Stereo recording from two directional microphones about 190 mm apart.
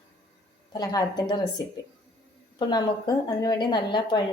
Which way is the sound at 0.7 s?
20° left (ahead or behind).